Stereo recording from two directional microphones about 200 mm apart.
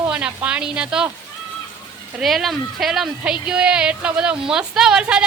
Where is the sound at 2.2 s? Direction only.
Centre (ahead or behind).